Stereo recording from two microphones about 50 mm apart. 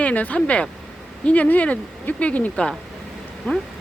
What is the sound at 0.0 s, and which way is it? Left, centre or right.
Speech, left.